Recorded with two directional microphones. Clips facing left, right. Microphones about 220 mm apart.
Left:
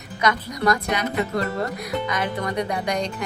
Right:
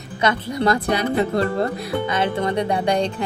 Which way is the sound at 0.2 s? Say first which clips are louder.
Right 3 dB; 30° right (ahead or behind).